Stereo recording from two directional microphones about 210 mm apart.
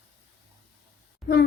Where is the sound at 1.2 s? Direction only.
Centre (ahead or behind).